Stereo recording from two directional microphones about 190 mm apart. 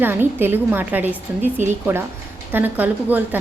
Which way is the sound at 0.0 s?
10° right (ahead or behind).